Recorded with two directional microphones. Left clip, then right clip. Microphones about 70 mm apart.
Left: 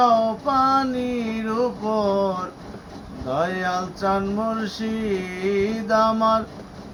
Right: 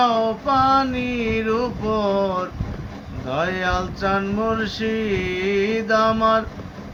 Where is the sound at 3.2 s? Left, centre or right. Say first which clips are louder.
Right 1 dB; left.